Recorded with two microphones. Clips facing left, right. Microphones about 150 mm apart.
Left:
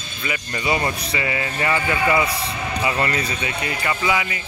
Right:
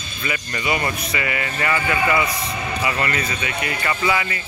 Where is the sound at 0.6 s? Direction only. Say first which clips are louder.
Left 1 dB; 30° left (ahead or behind).